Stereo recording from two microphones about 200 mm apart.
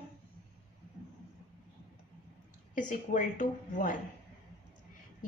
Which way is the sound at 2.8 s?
40° left (ahead or behind).